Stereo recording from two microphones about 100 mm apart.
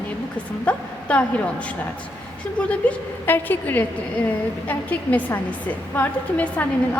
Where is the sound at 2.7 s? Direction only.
15° left (ahead or behind).